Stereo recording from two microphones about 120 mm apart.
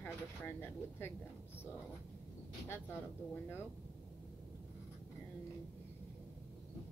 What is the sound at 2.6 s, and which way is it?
Speech, 20° left (ahead or behind).